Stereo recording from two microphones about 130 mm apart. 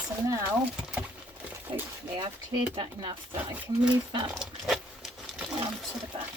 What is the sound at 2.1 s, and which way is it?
Speech, 40° right (ahead or behind).